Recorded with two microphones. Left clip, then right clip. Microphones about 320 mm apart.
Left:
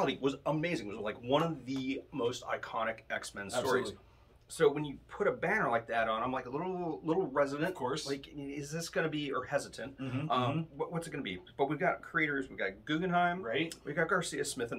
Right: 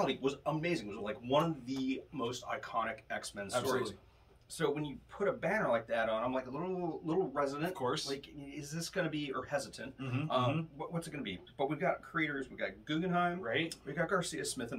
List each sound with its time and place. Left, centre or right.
0.0 s speech: centre
7.7 s speech: centre
8.5 s speech: centre
10.9 s speech: centre
13.4 s speech: centre
13.8 s speech: centre